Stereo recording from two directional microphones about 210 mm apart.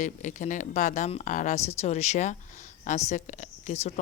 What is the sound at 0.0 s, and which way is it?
A woman's voice, 35° left (ahead or behind).